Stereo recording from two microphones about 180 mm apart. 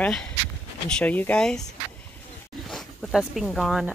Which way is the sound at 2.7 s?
Centre (ahead or behind).